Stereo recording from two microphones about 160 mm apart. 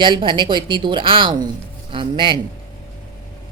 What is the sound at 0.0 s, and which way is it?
A woman's voice, 30° right (ahead or behind).